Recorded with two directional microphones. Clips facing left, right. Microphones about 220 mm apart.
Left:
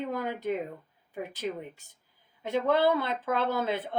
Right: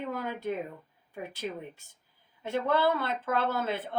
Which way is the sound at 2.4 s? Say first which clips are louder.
Left 2 dB; 20° left (ahead or behind).